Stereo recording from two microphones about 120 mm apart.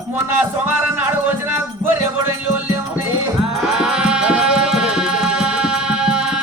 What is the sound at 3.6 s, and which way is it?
Music, 5° right (ahead or behind).